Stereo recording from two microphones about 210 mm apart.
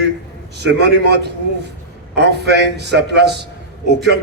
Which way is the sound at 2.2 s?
55° right (ahead or behind).